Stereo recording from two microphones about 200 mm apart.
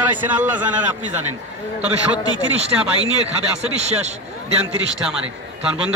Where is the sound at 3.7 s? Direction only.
35° right (ahead or behind).